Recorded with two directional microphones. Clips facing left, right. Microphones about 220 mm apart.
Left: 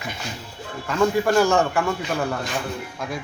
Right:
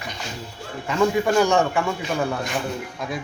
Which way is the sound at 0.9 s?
Centre (ahead or behind).